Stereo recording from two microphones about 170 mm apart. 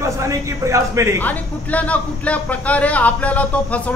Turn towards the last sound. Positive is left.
turn(degrees=10)  # may be behind; listen again after turning